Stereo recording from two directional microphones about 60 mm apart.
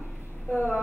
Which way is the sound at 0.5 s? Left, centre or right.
Right.